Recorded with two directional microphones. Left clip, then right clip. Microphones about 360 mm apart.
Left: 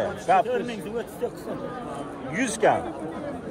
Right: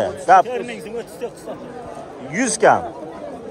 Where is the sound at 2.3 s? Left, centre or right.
Right.